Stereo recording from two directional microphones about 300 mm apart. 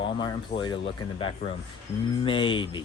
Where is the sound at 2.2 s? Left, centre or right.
Centre.